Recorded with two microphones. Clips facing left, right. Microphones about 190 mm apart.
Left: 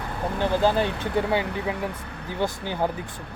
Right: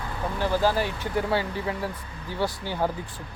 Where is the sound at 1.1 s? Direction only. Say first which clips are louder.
Left 1 dB; 20° left (ahead or behind).